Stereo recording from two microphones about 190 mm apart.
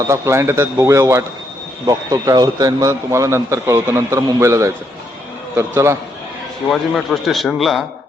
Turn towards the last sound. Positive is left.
turn(degrees=0)  # may be behind; listen again after turning